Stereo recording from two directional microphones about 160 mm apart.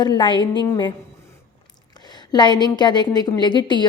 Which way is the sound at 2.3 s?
25° left (ahead or behind).